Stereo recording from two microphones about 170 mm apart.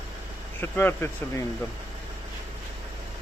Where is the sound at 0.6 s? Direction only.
10° left (ahead or behind).